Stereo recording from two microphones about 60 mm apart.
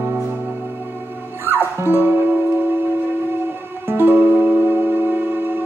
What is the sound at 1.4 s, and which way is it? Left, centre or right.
Music, right.